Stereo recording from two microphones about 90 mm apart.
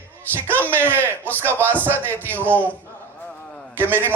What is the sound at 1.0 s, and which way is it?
A man's voice, 25° right (ahead or behind).